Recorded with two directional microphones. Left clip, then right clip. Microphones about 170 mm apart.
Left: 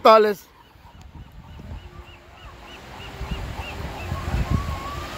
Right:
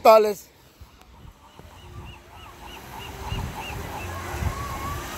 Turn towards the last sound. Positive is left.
turn(degrees=-5)  # may be behind; listen again after turning